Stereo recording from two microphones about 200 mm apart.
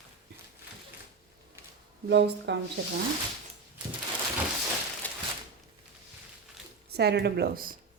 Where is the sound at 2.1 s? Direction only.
55° right (ahead or behind).